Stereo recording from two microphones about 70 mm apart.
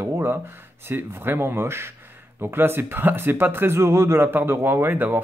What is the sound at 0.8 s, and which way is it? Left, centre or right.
Speech, right.